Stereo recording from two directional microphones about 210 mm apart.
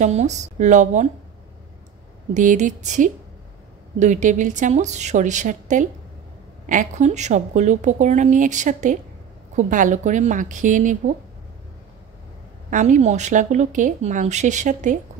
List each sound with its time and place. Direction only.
0.0 s speech: 35° right (ahead or behind)
2.3 s speech: 35° right (ahead or behind)
12.6 s speech: 35° right (ahead or behind)